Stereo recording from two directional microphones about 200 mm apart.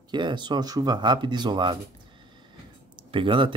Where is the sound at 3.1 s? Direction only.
25° right (ahead or behind).